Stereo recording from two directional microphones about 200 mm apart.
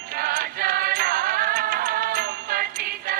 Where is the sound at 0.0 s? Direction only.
50° right (ahead or behind).